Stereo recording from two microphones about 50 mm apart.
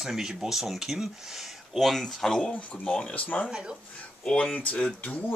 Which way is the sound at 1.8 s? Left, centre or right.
Centre.